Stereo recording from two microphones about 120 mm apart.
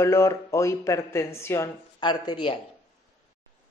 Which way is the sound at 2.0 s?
40° left (ahead or behind).